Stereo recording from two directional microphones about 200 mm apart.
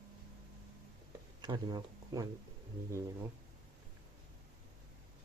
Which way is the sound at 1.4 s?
20° right (ahead or behind).